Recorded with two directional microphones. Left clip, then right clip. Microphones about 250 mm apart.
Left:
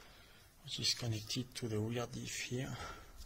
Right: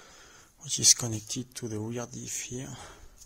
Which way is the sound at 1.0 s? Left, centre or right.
Right.